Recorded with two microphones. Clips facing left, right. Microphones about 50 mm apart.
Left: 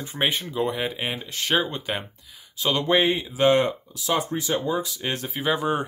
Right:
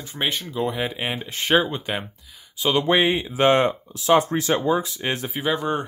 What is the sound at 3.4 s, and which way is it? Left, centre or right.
Speech, right.